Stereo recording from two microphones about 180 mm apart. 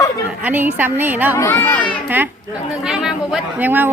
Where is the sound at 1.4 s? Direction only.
15° left (ahead or behind).